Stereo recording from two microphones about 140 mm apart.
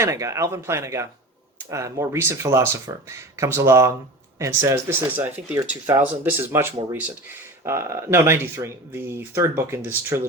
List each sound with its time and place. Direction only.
0.0 s speech: 20° right (ahead or behind)